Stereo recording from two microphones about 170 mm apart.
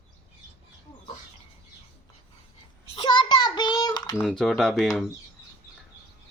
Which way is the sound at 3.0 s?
30° left (ahead or behind).